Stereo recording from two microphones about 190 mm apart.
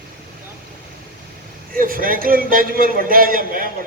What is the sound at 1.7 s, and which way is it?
A man's voice, 50° right (ahead or behind).